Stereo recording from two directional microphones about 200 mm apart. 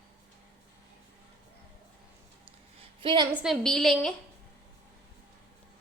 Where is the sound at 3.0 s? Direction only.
25° right (ahead or behind).